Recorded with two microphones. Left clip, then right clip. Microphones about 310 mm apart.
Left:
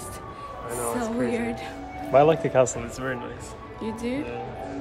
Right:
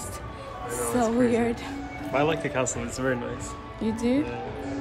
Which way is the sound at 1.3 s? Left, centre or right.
Centre.